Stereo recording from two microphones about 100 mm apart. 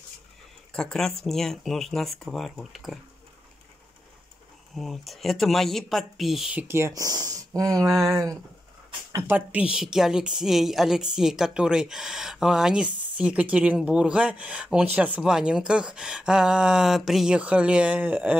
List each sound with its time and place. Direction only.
0.7 s speech: 5° left (ahead or behind)
4.7 s speech: centre (ahead or behind)
6.9 s speech: 40° right (ahead or behind)
9.5 s a woman's voice: 10° right (ahead or behind)